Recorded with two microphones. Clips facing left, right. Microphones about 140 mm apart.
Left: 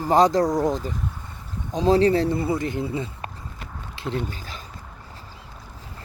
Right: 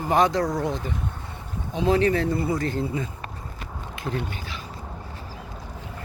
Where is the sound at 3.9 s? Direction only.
30° left (ahead or behind).